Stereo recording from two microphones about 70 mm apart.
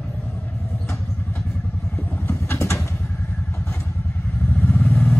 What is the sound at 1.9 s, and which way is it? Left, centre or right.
Vehicle, left.